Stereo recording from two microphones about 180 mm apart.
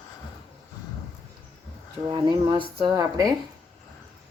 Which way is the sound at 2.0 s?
25° right (ahead or behind).